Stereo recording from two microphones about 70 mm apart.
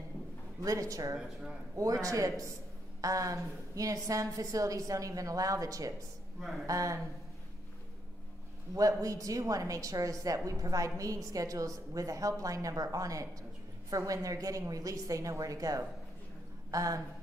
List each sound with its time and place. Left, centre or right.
0.6 s a woman's voice: right
8.7 s a woman's voice: right